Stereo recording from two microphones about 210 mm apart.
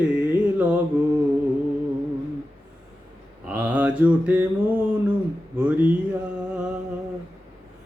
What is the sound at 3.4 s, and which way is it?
Speech, 5° right (ahead or behind).